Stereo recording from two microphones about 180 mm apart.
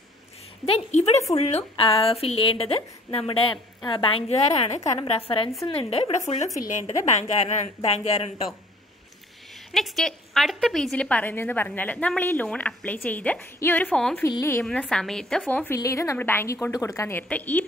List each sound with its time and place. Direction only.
0.7 s a woman's voice: 35° left (ahead or behind)
9.7 s a woman's voice: centre (ahead or behind)
14.2 s a woman's voice: 15° left (ahead or behind)
14.6 s a woman's voice: 5° left (ahead or behind)